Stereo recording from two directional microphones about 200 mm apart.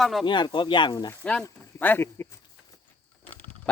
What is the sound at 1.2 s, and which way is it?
Speech, 5° left (ahead or behind).